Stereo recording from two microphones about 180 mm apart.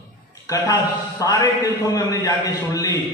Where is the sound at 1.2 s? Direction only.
20° left (ahead or behind).